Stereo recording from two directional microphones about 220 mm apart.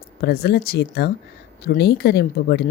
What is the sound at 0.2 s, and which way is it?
Speech, 45° left (ahead or behind).